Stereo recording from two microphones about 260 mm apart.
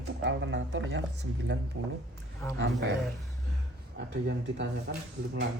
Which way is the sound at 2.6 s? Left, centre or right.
Right.